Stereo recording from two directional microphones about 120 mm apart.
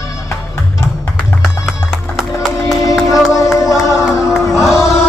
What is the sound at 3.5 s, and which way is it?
Music, 25° left (ahead or behind).